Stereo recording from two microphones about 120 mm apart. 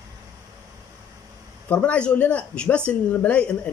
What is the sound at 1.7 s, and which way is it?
A man's voice, 10° left (ahead or behind).